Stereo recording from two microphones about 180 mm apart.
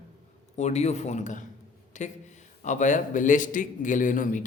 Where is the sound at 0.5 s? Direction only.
40° left (ahead or behind).